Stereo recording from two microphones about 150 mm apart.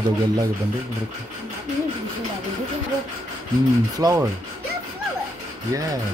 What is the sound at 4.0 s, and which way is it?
Speech, 20° right (ahead or behind).